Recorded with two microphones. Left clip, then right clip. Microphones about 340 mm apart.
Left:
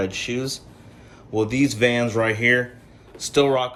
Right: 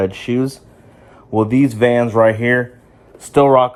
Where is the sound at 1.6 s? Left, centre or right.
Centre.